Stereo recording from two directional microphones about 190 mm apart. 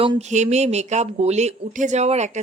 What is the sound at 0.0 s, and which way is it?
Speech, 30° right (ahead or behind).